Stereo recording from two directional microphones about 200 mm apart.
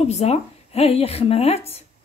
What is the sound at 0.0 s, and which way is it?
A woman's voice, 30° left (ahead or behind).